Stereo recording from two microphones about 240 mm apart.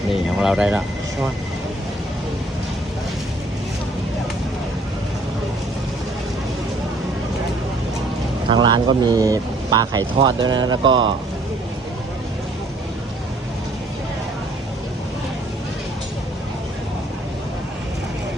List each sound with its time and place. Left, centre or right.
0.1 s speech: centre
8.4 s speech: centre